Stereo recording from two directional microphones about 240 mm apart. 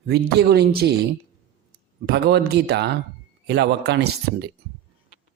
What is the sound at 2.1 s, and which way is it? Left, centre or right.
Speech, right.